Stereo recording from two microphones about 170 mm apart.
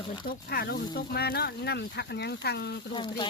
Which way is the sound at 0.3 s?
65° left (ahead or behind).